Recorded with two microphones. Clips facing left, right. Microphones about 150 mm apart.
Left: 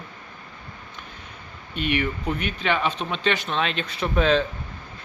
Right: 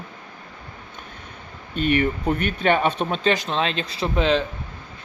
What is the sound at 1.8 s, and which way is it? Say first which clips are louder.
Speech: right 4 dB; 45° right (ahead or behind).